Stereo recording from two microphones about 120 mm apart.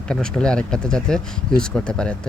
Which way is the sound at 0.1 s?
5° left (ahead or behind).